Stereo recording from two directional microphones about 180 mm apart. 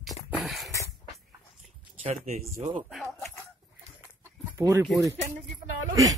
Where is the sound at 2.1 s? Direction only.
40° right (ahead or behind).